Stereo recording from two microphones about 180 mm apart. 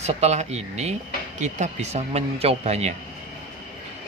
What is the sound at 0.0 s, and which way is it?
Speech, 35° right (ahead or behind).